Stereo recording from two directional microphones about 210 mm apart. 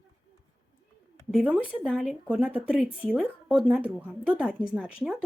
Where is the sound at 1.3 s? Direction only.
5° right (ahead or behind).